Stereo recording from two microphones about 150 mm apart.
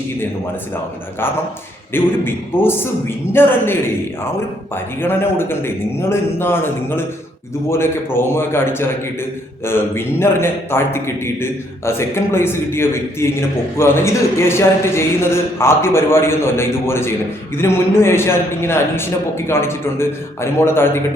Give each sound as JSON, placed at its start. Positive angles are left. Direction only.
{"t": 1.9, "sound": "a man's voice", "side_deg": 15}
{"t": 4.7, "sound": "a man's voice", "side_deg": 15}